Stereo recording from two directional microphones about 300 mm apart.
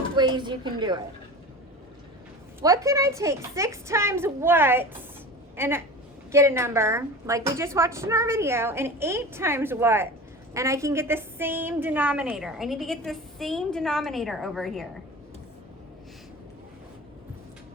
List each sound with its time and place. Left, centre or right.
0.2 s a woman's voice: centre
2.6 s a woman's voice: centre